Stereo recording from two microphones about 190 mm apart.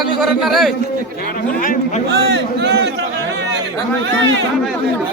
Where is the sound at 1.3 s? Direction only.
45° left (ahead or behind).